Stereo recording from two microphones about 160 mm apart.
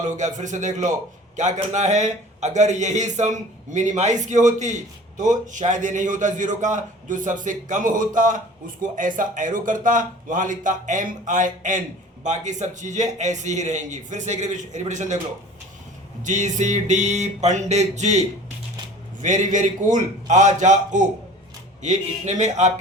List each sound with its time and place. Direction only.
0.0 s a man's voice: 50° right (ahead or behind)
16.2 s a man's voice: 50° right (ahead or behind)
19.2 s a man's voice: 50° right (ahead or behind)